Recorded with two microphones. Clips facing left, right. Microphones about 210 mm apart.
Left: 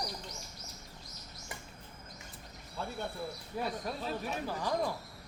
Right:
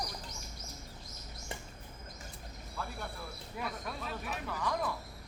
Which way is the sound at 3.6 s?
30° left (ahead or behind).